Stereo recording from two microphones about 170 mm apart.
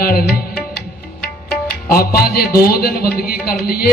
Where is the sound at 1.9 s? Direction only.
65° left (ahead or behind).